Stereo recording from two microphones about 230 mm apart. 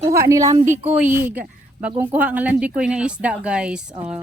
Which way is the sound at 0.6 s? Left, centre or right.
Right.